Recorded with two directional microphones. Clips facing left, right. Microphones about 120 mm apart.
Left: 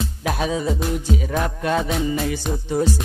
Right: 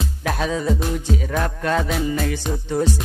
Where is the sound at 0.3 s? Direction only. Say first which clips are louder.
Right 1 dB; 15° left (ahead or behind).